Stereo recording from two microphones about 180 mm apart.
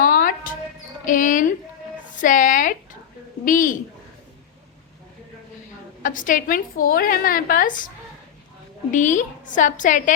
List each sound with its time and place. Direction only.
0.0 s music: 50° left (ahead or behind)
1.0 s a sound: 45° left (ahead or behind)
3.4 s a woman's voice: 45° left (ahead or behind)
6.0 s a woman's voice: 45° left (ahead or behind)
8.9 s a woman's voice: 45° left (ahead or behind)